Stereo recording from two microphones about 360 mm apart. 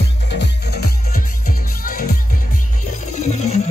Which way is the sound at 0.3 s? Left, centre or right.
Left.